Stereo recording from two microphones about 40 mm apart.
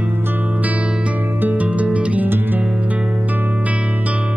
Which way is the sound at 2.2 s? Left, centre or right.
Right.